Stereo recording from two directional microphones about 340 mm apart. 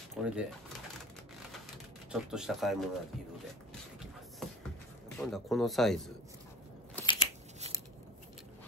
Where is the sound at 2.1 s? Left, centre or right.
Centre.